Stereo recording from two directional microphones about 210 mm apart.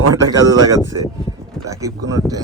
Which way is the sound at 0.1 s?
15° right (ahead or behind).